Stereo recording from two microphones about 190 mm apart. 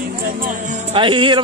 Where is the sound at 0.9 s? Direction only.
25° right (ahead or behind).